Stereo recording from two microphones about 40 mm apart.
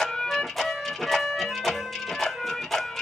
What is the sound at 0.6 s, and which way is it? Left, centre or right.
Music, centre.